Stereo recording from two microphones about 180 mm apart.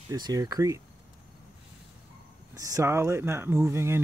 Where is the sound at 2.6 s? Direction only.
20° right (ahead or behind).